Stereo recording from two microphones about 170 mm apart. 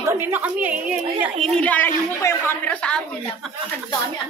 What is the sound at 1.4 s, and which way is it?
A woman's voice, 5° left (ahead or behind).